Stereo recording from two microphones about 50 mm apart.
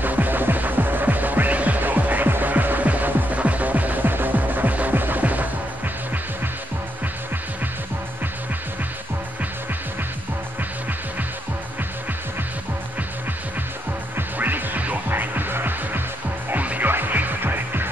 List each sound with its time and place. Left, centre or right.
0.0 s music: right
14.1 s music: right